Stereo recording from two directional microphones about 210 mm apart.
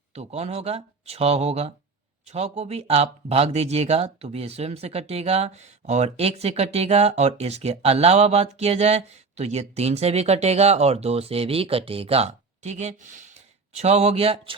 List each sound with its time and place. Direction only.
0.1 s speech: 30° right (ahead or behind)